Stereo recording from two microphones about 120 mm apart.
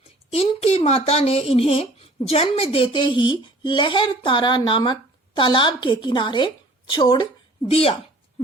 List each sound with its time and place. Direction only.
0.3 s a woman's voice: 55° left (ahead or behind); by 7.3 s 35° left (ahead or behind)
7.7 s a woman's voice: 55° left (ahead or behind)